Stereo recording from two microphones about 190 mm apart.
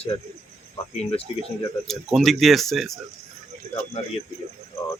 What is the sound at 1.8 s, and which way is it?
Speech, centre (ahead or behind).